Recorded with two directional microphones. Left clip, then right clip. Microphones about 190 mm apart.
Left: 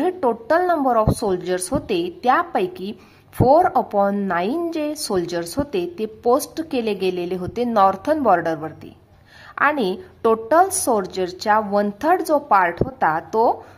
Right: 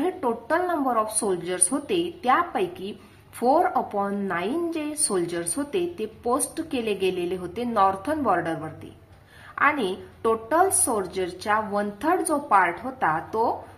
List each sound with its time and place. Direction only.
0.0 s a woman's voice: 35° left (ahead or behind)